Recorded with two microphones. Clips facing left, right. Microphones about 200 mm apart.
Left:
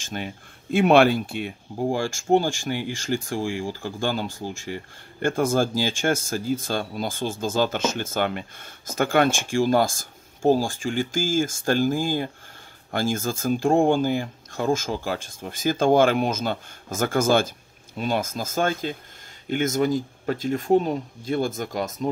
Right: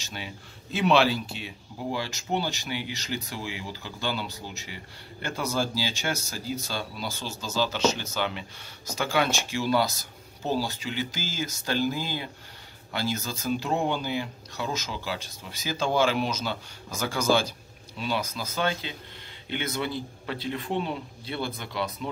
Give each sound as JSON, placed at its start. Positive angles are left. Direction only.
{"t": 0.0, "sound": "speech", "side_deg": 50}